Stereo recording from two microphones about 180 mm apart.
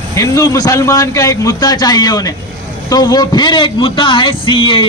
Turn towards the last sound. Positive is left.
turn(degrees=30)  # may be behind; listen again after turning